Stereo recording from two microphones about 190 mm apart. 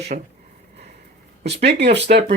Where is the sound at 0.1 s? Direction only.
40° right (ahead or behind).